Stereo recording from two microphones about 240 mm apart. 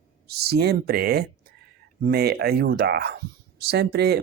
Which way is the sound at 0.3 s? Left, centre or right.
Right.